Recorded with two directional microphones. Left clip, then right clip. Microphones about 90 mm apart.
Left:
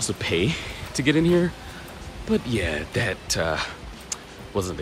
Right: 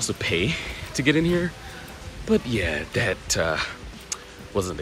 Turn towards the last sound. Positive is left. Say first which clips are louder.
# right 1 dB
turn(degrees=25)  # may be behind; listen again after turning